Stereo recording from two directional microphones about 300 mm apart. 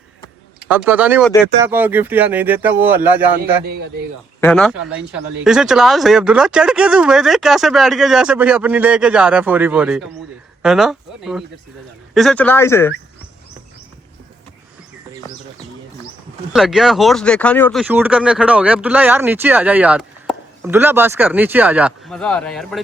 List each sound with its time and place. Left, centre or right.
0.6 s speech: centre
3.6 s speech: right
4.4 s speech: centre
16.5 s speech: centre